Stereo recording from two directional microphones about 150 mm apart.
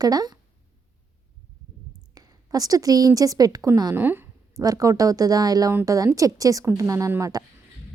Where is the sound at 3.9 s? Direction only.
15° right (ahead or behind).